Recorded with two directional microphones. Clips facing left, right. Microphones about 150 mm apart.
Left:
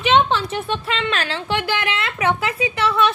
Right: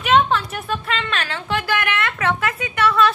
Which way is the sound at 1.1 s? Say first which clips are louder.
Left 1 dB; 30° left (ahead or behind).